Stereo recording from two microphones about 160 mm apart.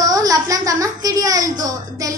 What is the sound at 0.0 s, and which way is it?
A child's voice, 25° right (ahead or behind).